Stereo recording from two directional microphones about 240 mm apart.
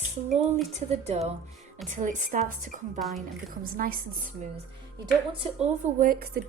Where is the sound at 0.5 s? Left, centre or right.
Right.